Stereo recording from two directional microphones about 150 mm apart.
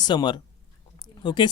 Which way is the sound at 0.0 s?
30° left (ahead or behind).